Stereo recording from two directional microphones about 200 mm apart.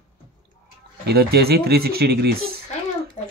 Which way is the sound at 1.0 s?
55° right (ahead or behind).